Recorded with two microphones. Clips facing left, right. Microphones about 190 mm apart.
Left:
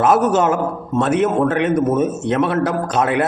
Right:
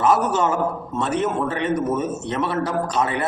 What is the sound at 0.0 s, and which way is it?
Speech, 90° left.